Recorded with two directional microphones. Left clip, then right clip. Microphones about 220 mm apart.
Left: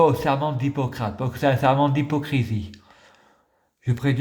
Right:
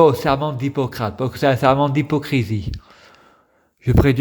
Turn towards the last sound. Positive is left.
turn(degrees=-35)  # may be behind; listen again after turning